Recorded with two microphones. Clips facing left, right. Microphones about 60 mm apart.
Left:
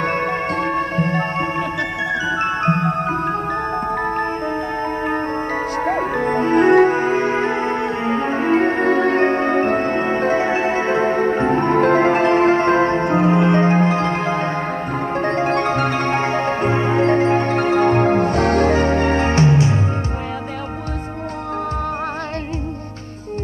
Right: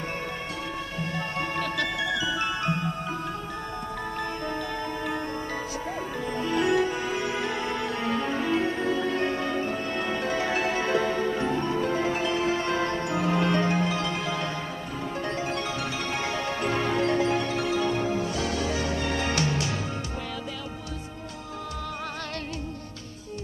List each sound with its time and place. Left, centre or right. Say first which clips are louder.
0.0 s music: left 13 dB; left
5.9 s music: left 13 dB; left